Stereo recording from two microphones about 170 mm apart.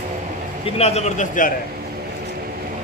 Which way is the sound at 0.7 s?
40° left (ahead or behind).